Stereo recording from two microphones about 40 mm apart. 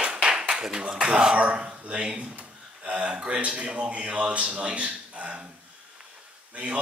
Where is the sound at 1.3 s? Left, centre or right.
Right.